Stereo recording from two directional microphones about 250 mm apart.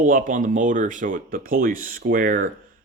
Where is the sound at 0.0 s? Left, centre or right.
Right.